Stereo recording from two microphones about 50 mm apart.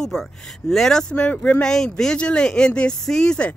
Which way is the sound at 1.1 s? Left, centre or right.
Left.